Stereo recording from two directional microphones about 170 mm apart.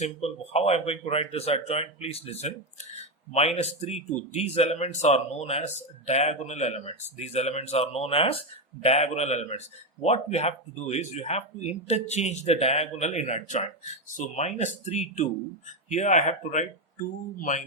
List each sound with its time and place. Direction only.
0.0 s speech: 35° left (ahead or behind)